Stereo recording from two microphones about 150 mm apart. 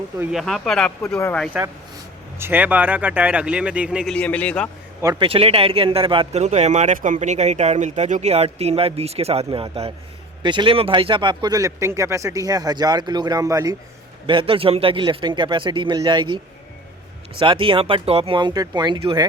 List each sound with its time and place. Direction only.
0.2 s a man's voice: 5° right (ahead or behind)
2.4 s speech: 10° right (ahead or behind)
4.1 s a man's voice: 10° left (ahead or behind)
5.2 s speech: 40° right (ahead or behind); by 13.7 s 20° right (ahead or behind)
14.3 s a man's voice: 35° right (ahead or behind)
17.4 s a man's voice: 35° right (ahead or behind)